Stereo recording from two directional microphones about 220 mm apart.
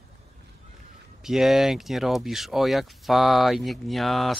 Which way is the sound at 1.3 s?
Centre (ahead or behind).